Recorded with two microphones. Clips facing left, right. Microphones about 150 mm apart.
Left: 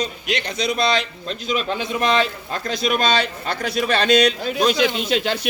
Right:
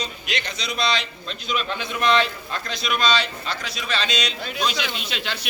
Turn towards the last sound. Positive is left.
turn(degrees=45)  # may be behind; listen again after turning